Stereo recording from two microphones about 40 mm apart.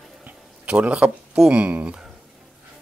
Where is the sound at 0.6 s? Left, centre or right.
Right.